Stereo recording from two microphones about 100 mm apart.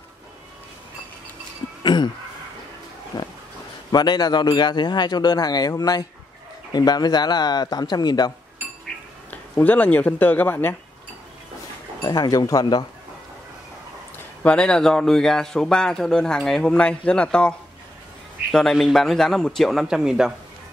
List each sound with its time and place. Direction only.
1.8 s a sound: 50° left (ahead or behind)
3.1 s pig: 45° left (ahead or behind)
3.9 s speech: 45° left (ahead or behind)
9.3 s a man's voice: 15° left (ahead or behind)
12.0 s speech: 40° left (ahead or behind)
14.4 s a man's voice: 10° left (ahead or behind); by 20.3 s 5° right (ahead or behind)